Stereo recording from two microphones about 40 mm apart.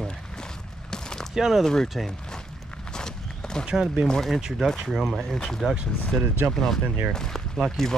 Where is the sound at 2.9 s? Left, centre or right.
Centre.